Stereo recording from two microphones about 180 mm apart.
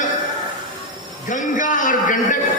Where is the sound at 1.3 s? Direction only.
45° left (ahead or behind).